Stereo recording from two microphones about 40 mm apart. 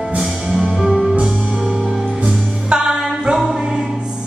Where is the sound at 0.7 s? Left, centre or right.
Centre.